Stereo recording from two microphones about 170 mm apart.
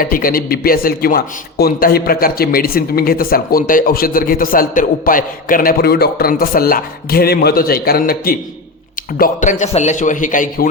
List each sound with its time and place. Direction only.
0.0 s a man's voice: 55° left (ahead or behind)